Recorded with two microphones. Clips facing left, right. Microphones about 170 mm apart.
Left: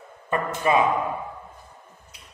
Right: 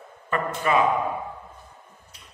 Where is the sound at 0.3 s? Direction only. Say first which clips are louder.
Left 1 dB; 20° left (ahead or behind).